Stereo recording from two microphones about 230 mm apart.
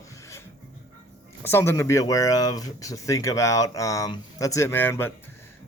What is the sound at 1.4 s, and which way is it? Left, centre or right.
Speech, centre.